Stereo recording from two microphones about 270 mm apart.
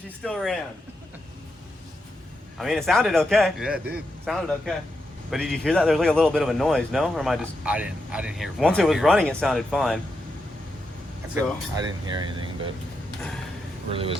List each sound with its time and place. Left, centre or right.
0.2 s a man's voice: centre
2.6 s a man's voice: centre
11.3 s speech: centre
13.9 s speech: centre